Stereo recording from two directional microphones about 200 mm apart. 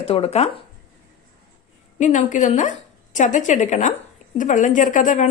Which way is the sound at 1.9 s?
35° left (ahead or behind).